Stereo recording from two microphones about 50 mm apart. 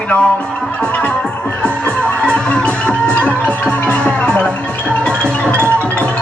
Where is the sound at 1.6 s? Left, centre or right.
Left.